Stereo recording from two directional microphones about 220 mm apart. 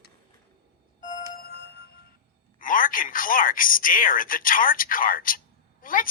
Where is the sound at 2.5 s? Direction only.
40° left (ahead or behind).